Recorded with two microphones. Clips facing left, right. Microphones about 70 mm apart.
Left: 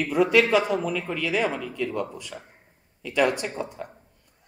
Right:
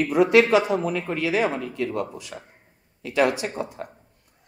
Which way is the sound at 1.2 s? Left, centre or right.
Centre.